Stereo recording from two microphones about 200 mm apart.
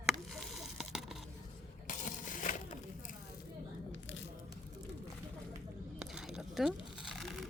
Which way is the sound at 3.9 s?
70° left (ahead or behind).